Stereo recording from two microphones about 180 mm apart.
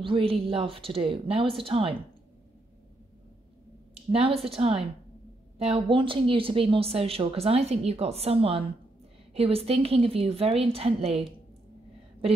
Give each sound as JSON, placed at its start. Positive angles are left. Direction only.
{"t": 0.0, "sound": "speech", "side_deg": -30}
{"t": 3.9, "sound": "a woman's voice", "side_deg": -35}